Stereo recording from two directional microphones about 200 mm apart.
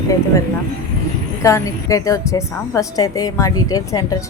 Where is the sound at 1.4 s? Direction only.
15° left (ahead or behind).